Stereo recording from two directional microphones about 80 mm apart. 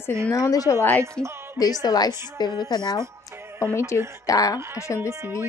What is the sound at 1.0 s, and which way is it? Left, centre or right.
Speech, right.